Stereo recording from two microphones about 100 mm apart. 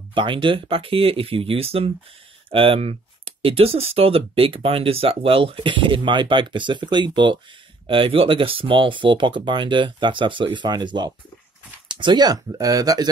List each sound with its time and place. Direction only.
0.1 s speech: 55° right (ahead or behind)
7.8 s speech: 60° right (ahead or behind); by 13.1 s 40° right (ahead or behind)